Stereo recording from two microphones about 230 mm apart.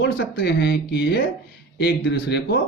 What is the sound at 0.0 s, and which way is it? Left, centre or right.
Speech, left.